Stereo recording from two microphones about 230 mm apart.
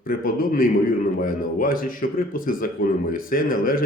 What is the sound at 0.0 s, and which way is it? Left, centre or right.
Speech, left.